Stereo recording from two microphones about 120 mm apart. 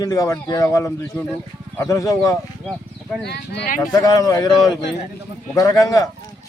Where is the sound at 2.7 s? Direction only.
5° left (ahead or behind).